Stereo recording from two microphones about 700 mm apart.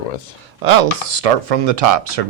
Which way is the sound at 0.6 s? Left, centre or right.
Right.